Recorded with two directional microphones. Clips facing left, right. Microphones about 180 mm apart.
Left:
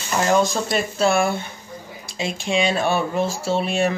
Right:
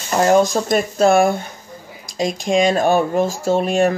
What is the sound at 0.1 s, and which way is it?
Speech, 45° right (ahead or behind).